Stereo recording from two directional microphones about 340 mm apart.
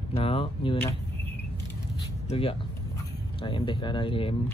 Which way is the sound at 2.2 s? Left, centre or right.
Centre.